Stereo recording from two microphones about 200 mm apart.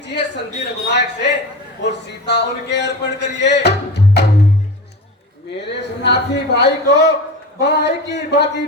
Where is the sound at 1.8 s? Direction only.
60° left (ahead or behind).